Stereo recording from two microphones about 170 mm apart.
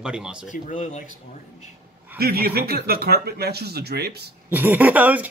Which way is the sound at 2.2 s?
65° right (ahead or behind).